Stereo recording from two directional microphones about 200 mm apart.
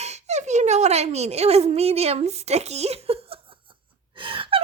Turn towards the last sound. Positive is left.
turn(degrees=-25)  # may be behind; listen again after turning